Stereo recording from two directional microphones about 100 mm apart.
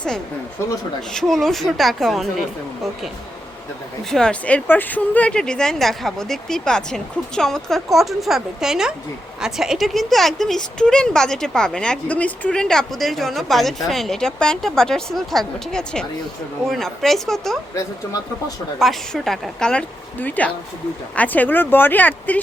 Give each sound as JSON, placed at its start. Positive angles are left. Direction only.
{"t": 1.1, "sound": "speech", "side_deg": 5}
{"t": 4.1, "sound": "speech", "side_deg": 10}
{"t": 18.8, "sound": "speech", "side_deg": 0}